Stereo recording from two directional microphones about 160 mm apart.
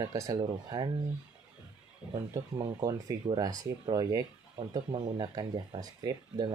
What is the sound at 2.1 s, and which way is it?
Speech, 25° right (ahead or behind).